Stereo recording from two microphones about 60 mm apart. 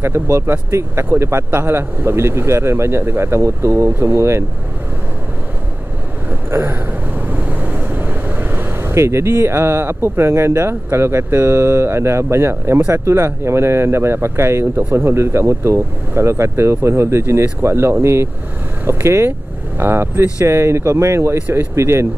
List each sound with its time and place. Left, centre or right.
0.0 s speech: right
6.5 s speech: right
7.2 s speech: right